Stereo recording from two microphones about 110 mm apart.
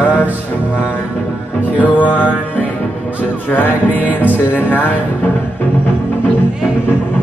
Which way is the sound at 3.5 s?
15° left (ahead or behind).